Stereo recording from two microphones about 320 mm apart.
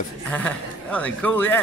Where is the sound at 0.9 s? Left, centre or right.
Centre.